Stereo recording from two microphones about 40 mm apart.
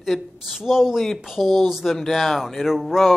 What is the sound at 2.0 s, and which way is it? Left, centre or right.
Speech, centre.